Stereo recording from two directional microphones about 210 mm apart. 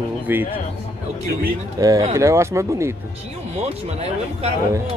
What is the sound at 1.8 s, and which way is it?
Speech, 15° right (ahead or behind).